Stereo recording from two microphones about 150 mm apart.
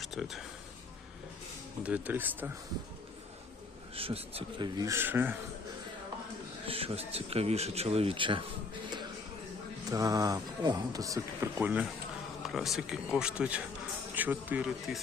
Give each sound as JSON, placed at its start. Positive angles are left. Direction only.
{"t": 0.0, "sound": "speech", "side_deg": 0}
{"t": 1.8, "sound": "speech", "side_deg": -10}
{"t": 3.9, "sound": "speech", "side_deg": -40}
{"t": 6.7, "sound": "speech", "side_deg": -40}
{"t": 9.9, "sound": "speech", "side_deg": -25}